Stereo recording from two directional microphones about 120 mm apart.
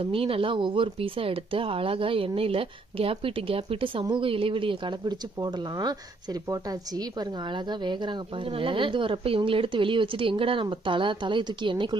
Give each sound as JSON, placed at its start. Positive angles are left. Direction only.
{"t": 0.0, "sound": "speech", "side_deg": -50}
{"t": 7.8, "sound": "speech", "side_deg": -40}